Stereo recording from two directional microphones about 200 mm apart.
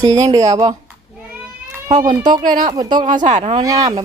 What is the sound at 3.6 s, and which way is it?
Speech, 15° right (ahead or behind).